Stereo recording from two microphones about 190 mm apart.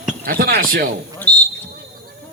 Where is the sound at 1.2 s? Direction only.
10° left (ahead or behind).